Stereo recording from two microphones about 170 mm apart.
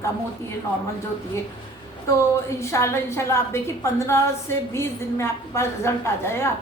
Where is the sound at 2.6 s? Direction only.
15° left (ahead or behind).